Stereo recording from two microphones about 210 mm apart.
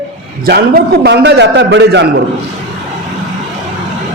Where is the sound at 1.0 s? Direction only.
55° right (ahead or behind).